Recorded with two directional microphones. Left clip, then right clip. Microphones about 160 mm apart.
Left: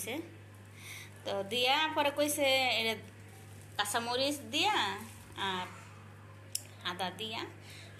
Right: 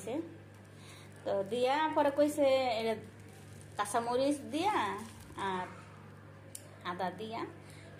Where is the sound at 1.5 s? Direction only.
20° right (ahead or behind).